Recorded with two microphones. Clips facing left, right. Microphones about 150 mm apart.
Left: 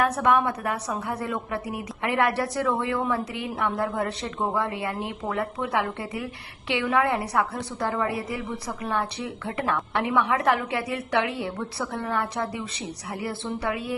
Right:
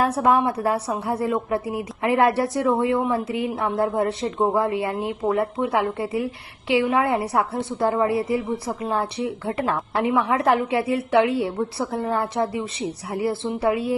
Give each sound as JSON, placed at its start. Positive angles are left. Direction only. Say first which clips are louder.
{"t": 0.0, "sound": "a woman's voice", "louder": "right 3 dB", "side_deg": -30}